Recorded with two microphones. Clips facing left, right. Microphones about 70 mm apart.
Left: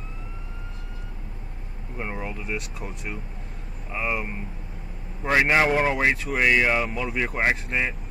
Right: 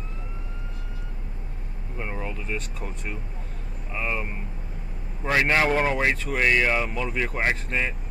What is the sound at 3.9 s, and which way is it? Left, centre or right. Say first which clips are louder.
Speech: left 2 dB; centre.